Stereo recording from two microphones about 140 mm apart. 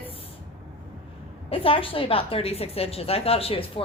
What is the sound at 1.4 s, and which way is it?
A woman's voice, 40° left (ahead or behind).